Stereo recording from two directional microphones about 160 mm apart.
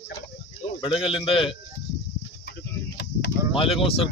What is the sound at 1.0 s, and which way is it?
Speech, 35° left (ahead or behind).